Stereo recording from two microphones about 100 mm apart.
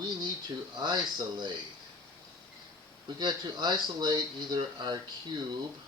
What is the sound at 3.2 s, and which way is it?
Speech, 45° right (ahead or behind).